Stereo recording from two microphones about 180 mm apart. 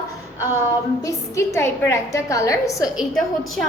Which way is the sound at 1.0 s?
15° left (ahead or behind).